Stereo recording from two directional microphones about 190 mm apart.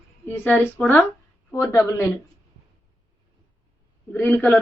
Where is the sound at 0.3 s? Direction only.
5° left (ahead or behind).